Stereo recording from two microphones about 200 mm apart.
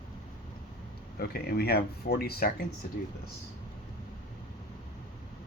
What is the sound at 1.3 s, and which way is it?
Speech, 50° left (ahead or behind).